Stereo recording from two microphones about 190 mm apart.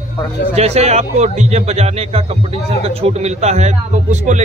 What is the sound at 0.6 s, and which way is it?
Speech, 35° right (ahead or behind).